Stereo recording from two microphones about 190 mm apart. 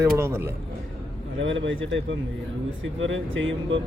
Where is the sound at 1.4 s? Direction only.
80° right.